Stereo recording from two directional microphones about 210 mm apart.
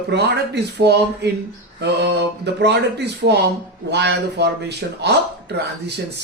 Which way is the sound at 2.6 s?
50° right (ahead or behind).